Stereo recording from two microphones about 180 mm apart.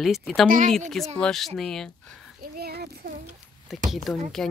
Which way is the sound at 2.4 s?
60° right (ahead or behind).